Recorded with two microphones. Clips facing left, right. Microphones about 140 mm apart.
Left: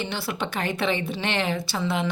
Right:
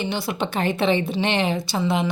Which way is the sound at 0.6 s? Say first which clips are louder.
Right 6 dB; 25° right (ahead or behind).